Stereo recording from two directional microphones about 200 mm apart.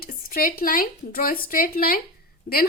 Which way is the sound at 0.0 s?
45° left (ahead or behind).